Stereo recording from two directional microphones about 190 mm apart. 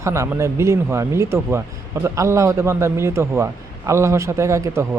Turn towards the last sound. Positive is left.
turn(degrees=-15)  # may be behind; listen again after turning